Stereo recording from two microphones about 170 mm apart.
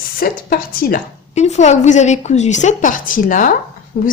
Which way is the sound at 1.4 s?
40° left (ahead or behind).